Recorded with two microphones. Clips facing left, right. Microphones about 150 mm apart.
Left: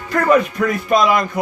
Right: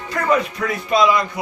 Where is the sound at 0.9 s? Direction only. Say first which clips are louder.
Even; 50° left (ahead or behind).